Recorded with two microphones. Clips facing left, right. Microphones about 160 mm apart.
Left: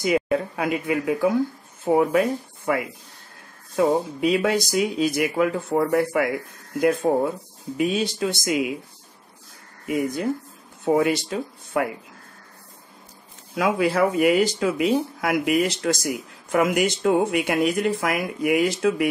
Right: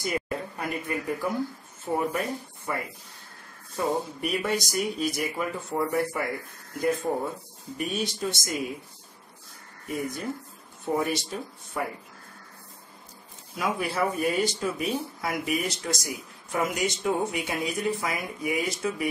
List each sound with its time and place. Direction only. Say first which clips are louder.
0.0 s speech: left 9 dB; 90° left
9.8 s speech: left 8 dB; 90° left
13.6 s speech: left 7 dB; 90° left